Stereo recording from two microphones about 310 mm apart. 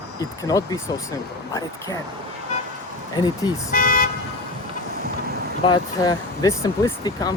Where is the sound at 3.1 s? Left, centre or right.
Centre.